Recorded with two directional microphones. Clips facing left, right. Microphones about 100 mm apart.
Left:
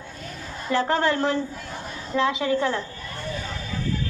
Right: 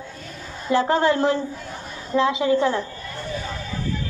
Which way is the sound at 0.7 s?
20° right (ahead or behind).